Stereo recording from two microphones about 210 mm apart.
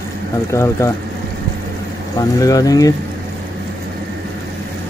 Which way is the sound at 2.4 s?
15° left (ahead or behind).